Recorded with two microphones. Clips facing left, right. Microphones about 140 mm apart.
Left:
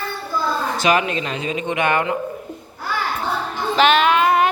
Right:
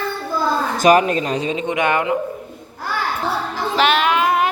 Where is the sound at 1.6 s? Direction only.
15° right (ahead or behind).